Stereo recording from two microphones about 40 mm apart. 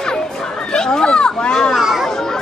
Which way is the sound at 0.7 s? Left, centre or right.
Centre.